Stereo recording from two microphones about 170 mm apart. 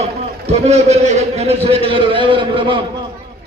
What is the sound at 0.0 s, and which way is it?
A man's voice, 40° right (ahead or behind).